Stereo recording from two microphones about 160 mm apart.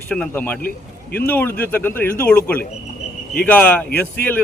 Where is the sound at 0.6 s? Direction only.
65° left (ahead or behind).